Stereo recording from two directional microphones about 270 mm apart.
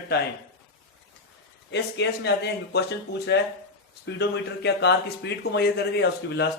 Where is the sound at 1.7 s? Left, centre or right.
Left.